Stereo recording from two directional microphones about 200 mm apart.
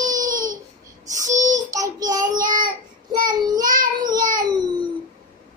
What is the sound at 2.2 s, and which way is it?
Child singing, 40° right (ahead or behind).